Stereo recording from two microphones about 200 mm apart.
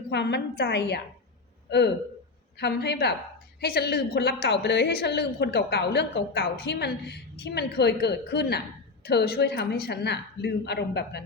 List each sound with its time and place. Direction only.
0.1 s a woman's voice: 60° left (ahead or behind)